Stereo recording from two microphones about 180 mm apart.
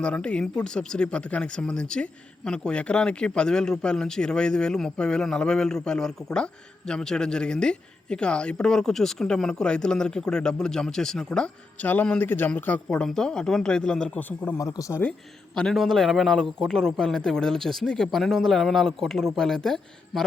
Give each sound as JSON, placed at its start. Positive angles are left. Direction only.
{"t": 0.0, "sound": "speech", "side_deg": 5}
{"t": 15.5, "sound": "speech", "side_deg": 0}